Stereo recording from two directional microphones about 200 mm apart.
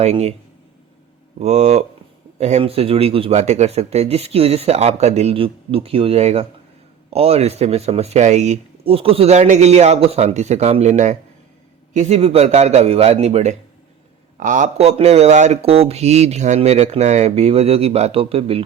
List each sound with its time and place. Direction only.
0.0 s speech: 35° right (ahead or behind)
1.4 s speech: 35° right (ahead or behind)